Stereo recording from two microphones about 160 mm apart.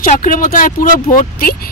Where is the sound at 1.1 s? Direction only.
65° left (ahead or behind).